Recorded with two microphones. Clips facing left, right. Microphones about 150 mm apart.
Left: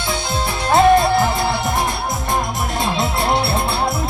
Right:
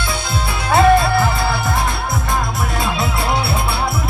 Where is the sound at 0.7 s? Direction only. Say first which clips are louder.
Even; 20° left (ahead or behind).